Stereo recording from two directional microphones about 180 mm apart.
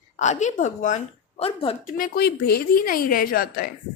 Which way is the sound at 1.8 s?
55° left (ahead or behind).